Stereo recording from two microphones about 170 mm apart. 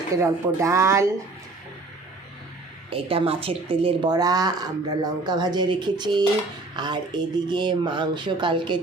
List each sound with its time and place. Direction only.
0.2 s speech: 15° right (ahead or behind)
2.9 s speech: 35° right (ahead or behind)